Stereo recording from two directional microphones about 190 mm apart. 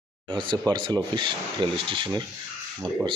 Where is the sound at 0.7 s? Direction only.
25° right (ahead or behind).